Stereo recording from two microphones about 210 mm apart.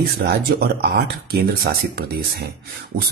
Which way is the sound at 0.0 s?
50° right (ahead or behind).